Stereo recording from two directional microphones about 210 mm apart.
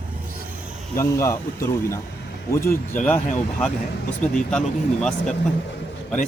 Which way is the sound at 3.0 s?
5° left (ahead or behind).